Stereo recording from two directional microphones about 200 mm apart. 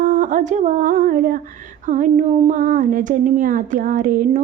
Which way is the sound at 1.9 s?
40° right (ahead or behind).